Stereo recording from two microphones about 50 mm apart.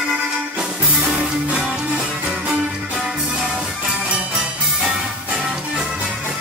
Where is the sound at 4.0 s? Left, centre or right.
Right.